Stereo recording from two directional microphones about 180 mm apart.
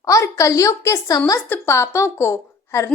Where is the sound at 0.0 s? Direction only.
20° left (ahead or behind).